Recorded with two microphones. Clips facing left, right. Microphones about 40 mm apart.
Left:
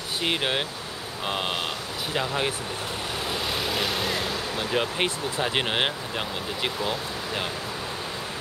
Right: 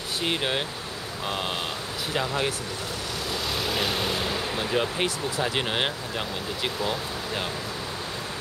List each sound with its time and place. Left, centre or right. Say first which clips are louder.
0.2 s speech: left 1 dB; centre
1.2 s vehicle: left 2 dB; centre
2.1 s speech: even; centre
3.5 s vehicle: right 2 dB; centre
4.7 s speech: left 1 dB; centre